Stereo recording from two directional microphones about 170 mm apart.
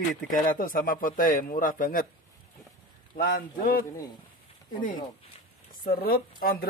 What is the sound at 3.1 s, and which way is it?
Speech, 55° left (ahead or behind).